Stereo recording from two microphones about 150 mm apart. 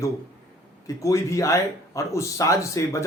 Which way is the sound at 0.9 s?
20° left (ahead or behind).